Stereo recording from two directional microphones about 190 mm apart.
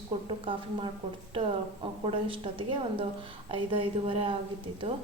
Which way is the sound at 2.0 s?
25° right (ahead or behind).